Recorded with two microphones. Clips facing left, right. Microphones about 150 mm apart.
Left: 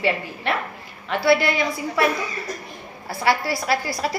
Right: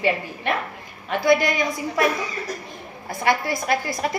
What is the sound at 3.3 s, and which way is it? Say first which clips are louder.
Speech: even; 20° right (ahead or behind).